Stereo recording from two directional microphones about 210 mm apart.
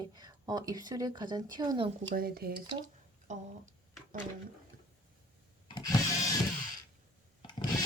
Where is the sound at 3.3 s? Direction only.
35° right (ahead or behind).